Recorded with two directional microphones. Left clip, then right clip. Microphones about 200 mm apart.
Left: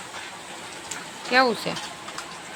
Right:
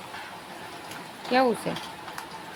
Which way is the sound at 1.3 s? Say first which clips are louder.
Left 3 dB; 15° right (ahead or behind).